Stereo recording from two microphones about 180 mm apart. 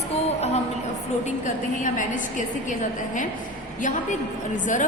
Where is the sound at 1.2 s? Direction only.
45° left (ahead or behind).